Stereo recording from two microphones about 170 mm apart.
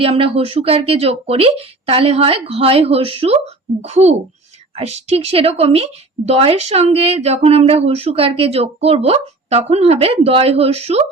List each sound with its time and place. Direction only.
0.0 s a woman's voice: 35° right (ahead or behind)